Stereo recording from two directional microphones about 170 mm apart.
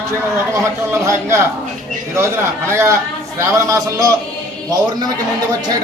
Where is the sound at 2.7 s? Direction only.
15° right (ahead or behind).